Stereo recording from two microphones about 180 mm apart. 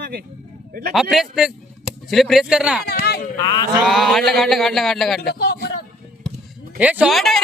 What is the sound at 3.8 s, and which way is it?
A man's voice, centre (ahead or behind).